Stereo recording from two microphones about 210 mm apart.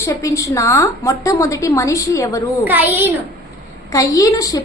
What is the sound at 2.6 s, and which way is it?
Speech, 10° right (ahead or behind).